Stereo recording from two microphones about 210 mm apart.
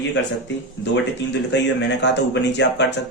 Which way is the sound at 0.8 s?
60° left (ahead or behind).